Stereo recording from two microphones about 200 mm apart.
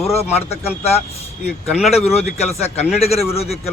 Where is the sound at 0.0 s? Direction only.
30° left (ahead or behind).